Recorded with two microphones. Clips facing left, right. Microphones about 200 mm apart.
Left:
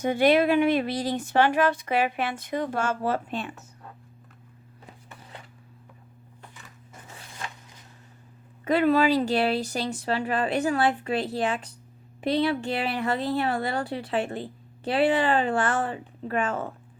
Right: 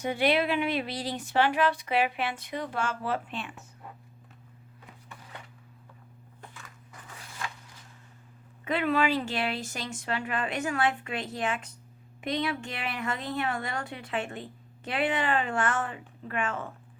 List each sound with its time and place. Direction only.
0.0 s speech: 45° left (ahead or behind)
6.9 s biting: 20° left (ahead or behind)
8.6 s a woman's voice: 40° left (ahead or behind)